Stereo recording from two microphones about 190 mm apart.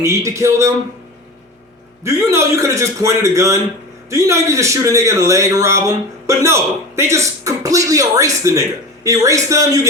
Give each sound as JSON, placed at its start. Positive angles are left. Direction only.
{"t": 0.0, "sound": "a man's voice", "side_deg": -15}
{"t": 2.0, "sound": "a man's voice", "side_deg": -15}